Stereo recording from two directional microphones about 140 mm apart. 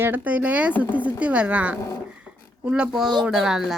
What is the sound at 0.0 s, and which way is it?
Speech, 10° right (ahead or behind).